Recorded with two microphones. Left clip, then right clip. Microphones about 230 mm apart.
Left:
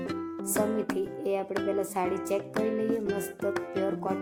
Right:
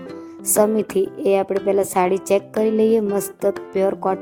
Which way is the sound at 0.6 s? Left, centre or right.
Right.